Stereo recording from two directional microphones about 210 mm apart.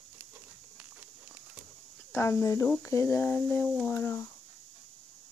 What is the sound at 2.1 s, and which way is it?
Speech, 15° left (ahead or behind).